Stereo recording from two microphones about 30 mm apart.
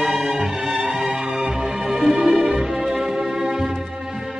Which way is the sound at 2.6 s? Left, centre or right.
Centre.